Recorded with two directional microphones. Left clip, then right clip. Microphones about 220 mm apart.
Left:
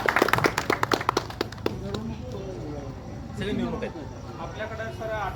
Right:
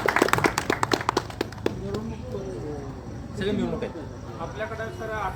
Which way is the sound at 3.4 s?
50° right (ahead or behind).